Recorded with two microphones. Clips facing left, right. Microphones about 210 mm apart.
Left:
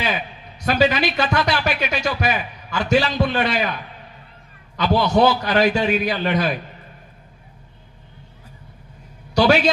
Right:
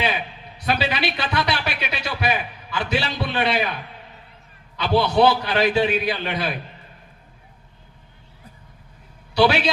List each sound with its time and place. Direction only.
0.6 s a man's voice: 45° left (ahead or behind)
4.8 s a man's voice: 45° left (ahead or behind)
9.3 s a man's voice: 45° left (ahead or behind)